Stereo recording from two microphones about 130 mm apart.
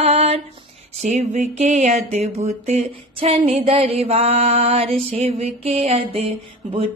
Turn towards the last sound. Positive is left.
turn(degrees=-50)  # may be behind; listen again after turning